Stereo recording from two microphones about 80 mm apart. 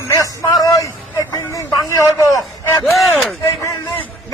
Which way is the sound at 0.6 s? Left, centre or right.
Left.